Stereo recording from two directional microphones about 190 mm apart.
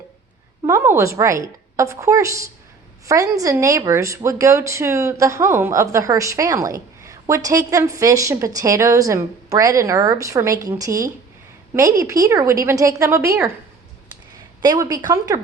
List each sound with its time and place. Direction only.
0.6 s speech: 15° right (ahead or behind)
14.6 s speech: 20° right (ahead or behind)